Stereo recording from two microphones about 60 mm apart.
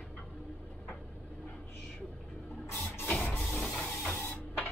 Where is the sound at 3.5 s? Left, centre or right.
Left.